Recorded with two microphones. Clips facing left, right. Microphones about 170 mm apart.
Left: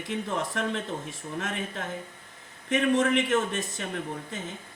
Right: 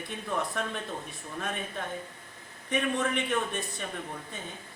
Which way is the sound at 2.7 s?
85° left.